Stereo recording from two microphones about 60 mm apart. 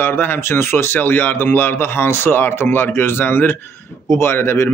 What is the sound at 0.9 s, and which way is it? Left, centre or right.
A man's voice, left.